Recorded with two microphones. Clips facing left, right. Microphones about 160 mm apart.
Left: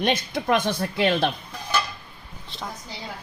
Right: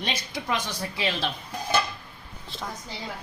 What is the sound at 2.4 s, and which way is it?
Speech, centre (ahead or behind).